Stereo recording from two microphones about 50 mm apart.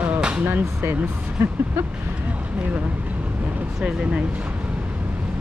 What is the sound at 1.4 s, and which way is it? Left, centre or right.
Speech, right.